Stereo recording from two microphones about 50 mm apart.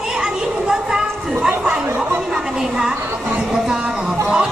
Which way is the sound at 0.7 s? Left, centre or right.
Centre.